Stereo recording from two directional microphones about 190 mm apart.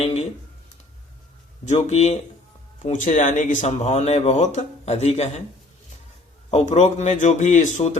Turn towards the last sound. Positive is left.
turn(degrees=40)  # may be behind; listen again after turning